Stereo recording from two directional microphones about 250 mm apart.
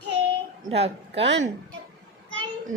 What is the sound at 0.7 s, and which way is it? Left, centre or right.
Speech, right.